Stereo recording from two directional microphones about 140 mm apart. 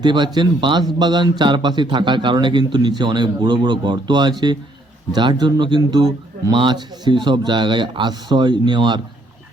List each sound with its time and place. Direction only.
0.0 s a man's voice: 35° right (ahead or behind)